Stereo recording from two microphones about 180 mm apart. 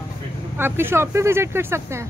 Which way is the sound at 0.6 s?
10° right (ahead or behind).